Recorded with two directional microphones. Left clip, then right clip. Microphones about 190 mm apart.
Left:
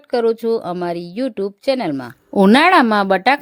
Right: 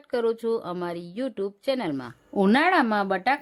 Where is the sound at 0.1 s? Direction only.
35° left (ahead or behind).